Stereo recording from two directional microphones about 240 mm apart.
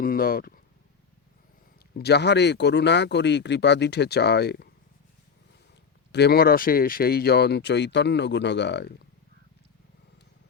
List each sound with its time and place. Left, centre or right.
0.0 s speech: left
1.9 s speech: left
6.1 s speech: left